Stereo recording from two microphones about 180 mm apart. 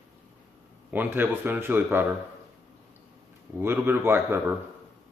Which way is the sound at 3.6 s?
10° right (ahead or behind).